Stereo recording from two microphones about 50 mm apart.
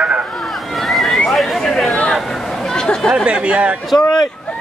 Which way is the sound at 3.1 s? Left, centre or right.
Centre.